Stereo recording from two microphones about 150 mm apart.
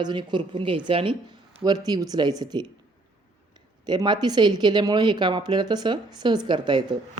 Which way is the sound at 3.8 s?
30° right (ahead or behind).